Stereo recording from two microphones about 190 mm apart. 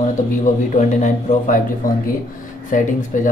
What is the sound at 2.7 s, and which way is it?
Speech, 40° left (ahead or behind).